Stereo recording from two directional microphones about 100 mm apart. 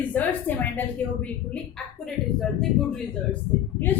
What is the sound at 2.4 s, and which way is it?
Speech, 5° left (ahead or behind).